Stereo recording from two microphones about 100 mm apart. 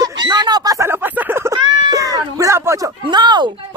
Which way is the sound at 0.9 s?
20° right (ahead or behind).